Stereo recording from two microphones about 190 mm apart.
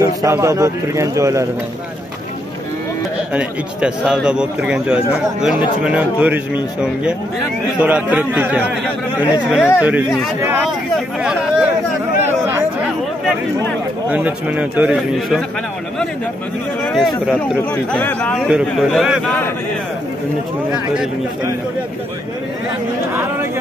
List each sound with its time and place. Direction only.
0.0 s a man's voice: 15° right (ahead or behind)
3.3 s a man's voice: 5° right (ahead or behind)
14.0 s a man's voice: 5° right (ahead or behind)
16.8 s a man's voice: centre (ahead or behind)